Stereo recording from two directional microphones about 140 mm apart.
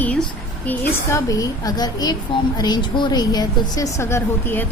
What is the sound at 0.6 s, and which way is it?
Speech, 10° left (ahead or behind).